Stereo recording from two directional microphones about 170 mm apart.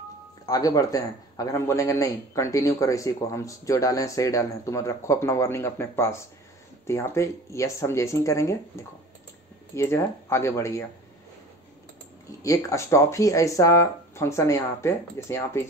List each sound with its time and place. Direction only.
0.5 s a man's voice: 20° left (ahead or behind)
12.4 s speech: 15° left (ahead or behind)